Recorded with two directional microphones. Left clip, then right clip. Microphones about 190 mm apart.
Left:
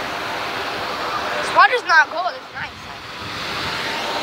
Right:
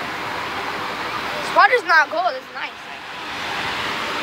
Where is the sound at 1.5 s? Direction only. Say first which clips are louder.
Left 1 dB; 10° right (ahead or behind).